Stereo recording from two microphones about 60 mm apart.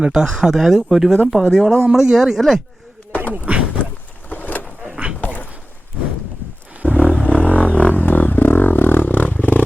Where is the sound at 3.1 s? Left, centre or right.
Left.